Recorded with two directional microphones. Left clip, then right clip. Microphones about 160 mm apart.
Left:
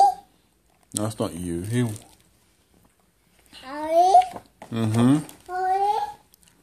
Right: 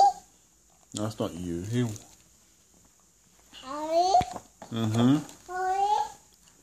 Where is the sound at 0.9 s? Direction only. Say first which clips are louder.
Left 4 dB; 15° left (ahead or behind).